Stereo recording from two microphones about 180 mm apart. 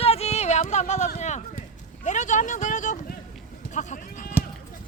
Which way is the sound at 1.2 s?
40° left (ahead or behind).